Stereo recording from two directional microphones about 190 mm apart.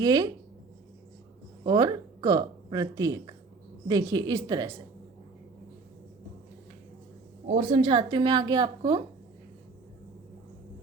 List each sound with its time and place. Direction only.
0.0 s a woman's voice: 20° right (ahead or behind)
1.6 s a woman's voice: 20° right (ahead or behind)
7.4 s a woman's voice: 35° right (ahead or behind)